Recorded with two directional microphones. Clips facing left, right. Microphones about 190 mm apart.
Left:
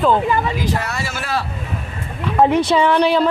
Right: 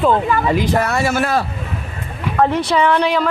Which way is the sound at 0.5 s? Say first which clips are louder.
Right 5 dB; 55° right (ahead or behind).